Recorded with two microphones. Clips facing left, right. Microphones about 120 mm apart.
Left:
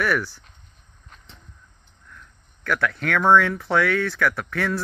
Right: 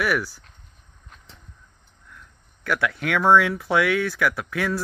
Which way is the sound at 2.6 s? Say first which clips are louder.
Even; 15° right (ahead or behind).